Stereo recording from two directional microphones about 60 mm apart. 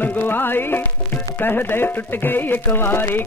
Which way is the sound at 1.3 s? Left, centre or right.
Left.